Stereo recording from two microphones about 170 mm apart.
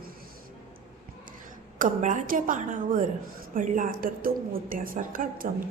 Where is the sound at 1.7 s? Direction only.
50° right (ahead or behind).